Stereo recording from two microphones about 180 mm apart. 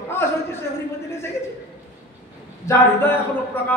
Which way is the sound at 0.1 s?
15° left (ahead or behind).